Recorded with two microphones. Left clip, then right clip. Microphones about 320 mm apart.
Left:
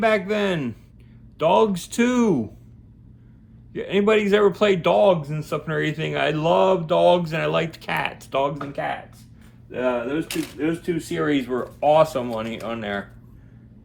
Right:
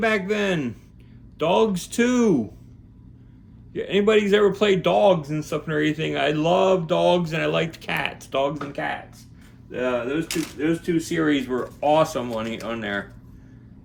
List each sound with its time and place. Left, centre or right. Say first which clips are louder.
0.0 s speech: left 2 dB; centre
3.7 s speech: even; centre